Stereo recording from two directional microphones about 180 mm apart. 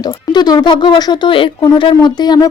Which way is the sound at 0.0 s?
25° left (ahead or behind).